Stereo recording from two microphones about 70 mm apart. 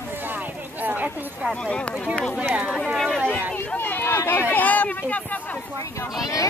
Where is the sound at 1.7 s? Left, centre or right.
Centre.